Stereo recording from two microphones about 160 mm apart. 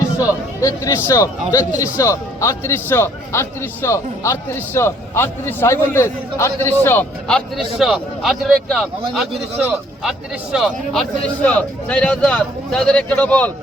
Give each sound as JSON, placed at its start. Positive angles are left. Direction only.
{"t": 0.2, "sound": "a man's voice", "side_deg": 20}
{"t": 10.0, "sound": "a man's voice", "side_deg": -5}